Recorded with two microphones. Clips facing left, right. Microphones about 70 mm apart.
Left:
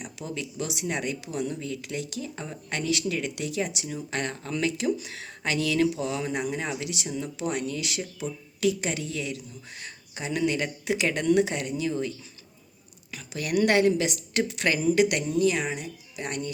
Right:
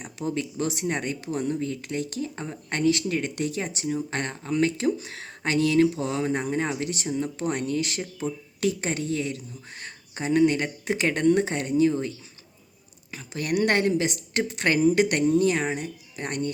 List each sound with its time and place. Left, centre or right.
0.0 s speech: right